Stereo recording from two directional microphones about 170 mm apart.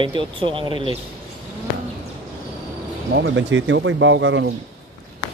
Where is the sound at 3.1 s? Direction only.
80° right.